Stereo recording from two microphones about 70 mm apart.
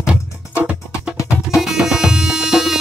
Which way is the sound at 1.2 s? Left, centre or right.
Centre.